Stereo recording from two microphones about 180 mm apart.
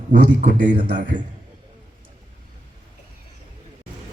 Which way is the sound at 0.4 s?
50° right (ahead or behind).